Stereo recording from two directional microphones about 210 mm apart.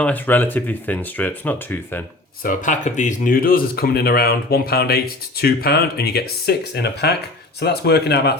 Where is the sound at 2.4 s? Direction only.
35° left (ahead or behind).